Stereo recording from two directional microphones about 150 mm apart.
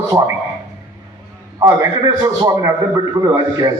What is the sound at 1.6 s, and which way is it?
A man's voice, 25° right (ahead or behind).